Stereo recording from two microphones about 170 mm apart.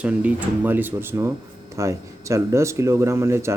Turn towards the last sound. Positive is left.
turn(degrees=-15)  # may be behind; listen again after turning